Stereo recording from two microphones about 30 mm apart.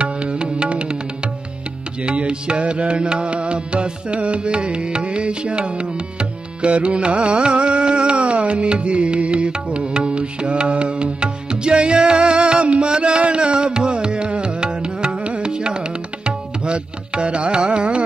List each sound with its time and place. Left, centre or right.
0.0 s music: right
2.0 s music: right
15.4 s tabla: right